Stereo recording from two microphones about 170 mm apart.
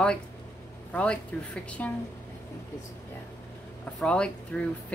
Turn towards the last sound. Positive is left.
turn(degrees=5)  # may be behind; listen again after turning